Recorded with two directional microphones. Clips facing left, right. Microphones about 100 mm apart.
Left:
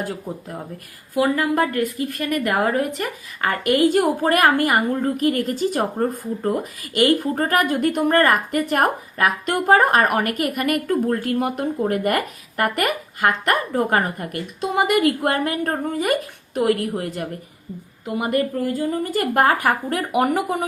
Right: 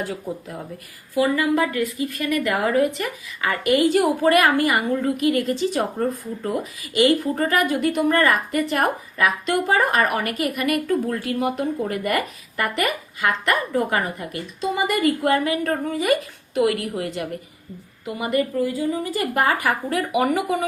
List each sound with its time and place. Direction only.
1.1 s a woman's voice: 50° left (ahead or behind)